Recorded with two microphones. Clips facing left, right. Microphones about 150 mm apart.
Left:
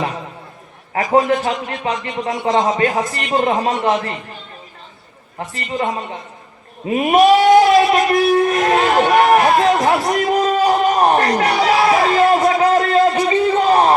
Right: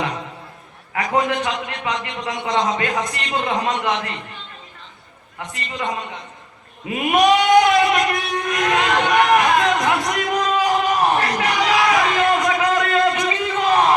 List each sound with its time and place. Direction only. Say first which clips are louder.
0.9 s a man's voice: left 5 dB; 30° left (ahead or behind)
5.4 s speech: left 4 dB; 35° left (ahead or behind)
6.8 s a sound: left 4 dB; 30° left (ahead or behind)